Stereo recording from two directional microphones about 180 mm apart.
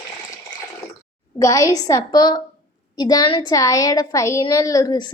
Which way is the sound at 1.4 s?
20° left (ahead or behind).